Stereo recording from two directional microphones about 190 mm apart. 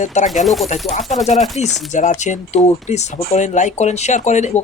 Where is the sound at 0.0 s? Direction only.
40° left (ahead or behind).